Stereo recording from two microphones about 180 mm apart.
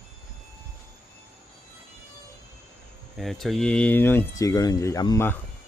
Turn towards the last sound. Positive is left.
turn(degrees=15)  # may be behind; listen again after turning